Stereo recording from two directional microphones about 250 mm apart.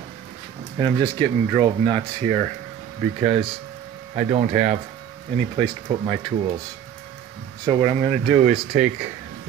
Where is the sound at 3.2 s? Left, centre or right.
Right.